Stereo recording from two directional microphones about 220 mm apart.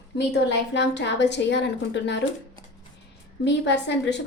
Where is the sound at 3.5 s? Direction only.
50° left (ahead or behind).